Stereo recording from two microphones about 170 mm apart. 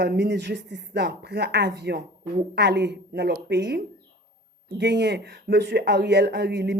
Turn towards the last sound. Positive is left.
turn(degrees=-85)